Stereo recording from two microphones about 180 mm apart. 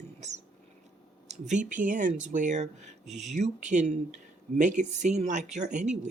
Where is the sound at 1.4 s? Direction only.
45° right (ahead or behind).